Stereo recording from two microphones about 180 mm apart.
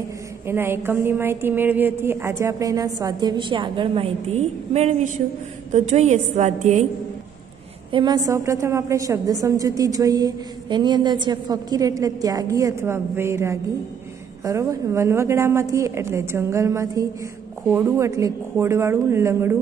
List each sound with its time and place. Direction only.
0.5 s a woman's voice: 15° right (ahead or behind); by 6.9 s 40° right (ahead or behind)
7.9 s a woman's voice: 25° right (ahead or behind)